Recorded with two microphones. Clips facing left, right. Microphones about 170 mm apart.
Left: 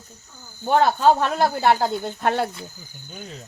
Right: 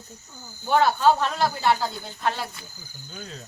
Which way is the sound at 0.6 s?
45° left (ahead or behind).